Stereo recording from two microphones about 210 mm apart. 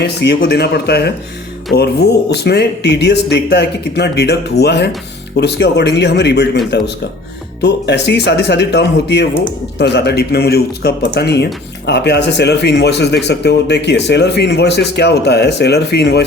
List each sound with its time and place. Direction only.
0.0 s speech: 50° left (ahead or behind)